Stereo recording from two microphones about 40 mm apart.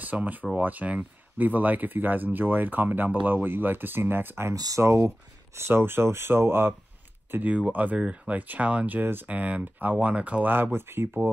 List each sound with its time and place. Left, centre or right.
0.0 s speech: right
4.8 s speech: right
5.6 s speech: right
7.3 s speech: right
7.7 s speech: right
8.0 s speech: right
8.9 s speech: right
9.3 s speech: right
10.1 s speech: right
10.4 s speech: right